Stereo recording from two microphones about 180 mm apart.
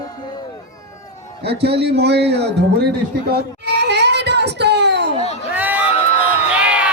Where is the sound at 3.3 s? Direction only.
70° right (ahead or behind).